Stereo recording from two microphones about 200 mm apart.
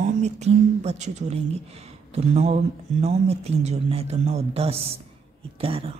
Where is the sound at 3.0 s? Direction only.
30° right (ahead or behind).